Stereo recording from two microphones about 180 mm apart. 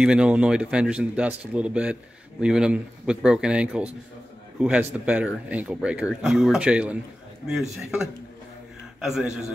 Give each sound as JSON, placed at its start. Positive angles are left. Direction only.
{"t": 0.0, "sound": "speech", "side_deg": -5}